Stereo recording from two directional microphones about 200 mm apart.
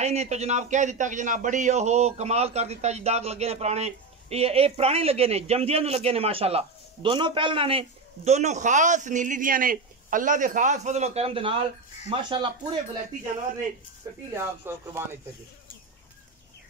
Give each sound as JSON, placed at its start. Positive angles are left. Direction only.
{"t": 0.0, "sound": "a man's voice", "side_deg": -35}
{"t": 14.6, "sound": "speech", "side_deg": -10}